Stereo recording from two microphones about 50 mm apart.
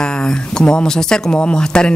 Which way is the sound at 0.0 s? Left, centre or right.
Centre.